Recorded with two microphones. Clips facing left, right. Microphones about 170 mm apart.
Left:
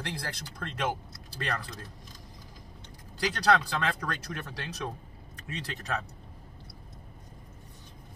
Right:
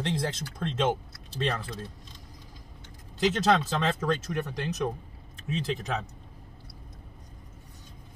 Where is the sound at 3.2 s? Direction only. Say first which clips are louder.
Right 2 dB; 20° right (ahead or behind).